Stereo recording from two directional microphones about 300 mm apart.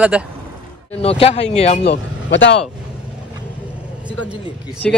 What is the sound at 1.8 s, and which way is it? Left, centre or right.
Speech, left.